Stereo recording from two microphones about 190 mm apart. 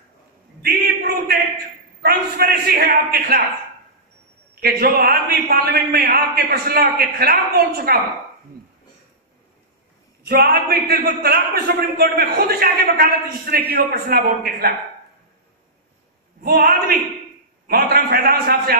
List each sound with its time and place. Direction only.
0.6 s a sound: 55° right (ahead or behind)
2.0 s a man's voice: 55° right (ahead or behind)
4.6 s a man's voice: 55° right (ahead or behind)
10.2 s a man's voice: 55° right (ahead or behind)
16.4 s a man's voice: 55° right (ahead or behind)